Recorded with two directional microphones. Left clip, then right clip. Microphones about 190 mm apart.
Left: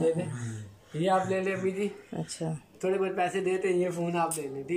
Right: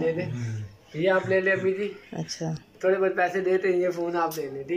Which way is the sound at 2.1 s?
Centre (ahead or behind).